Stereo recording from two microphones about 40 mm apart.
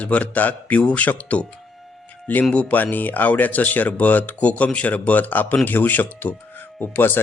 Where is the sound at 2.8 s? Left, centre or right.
Left.